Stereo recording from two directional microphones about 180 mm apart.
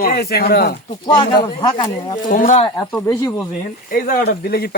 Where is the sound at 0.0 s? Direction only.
60° left (ahead or behind).